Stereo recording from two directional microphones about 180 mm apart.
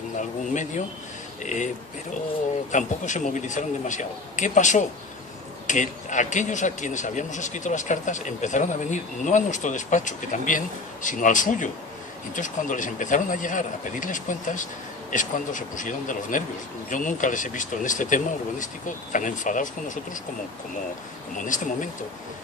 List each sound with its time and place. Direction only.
0.5 s speech: 45° left (ahead or behind)
2.7 s speech: 45° left (ahead or behind)